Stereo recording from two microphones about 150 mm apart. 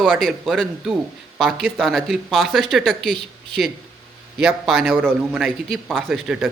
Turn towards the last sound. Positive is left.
turn(degrees=-5)  # may be behind; listen again after turning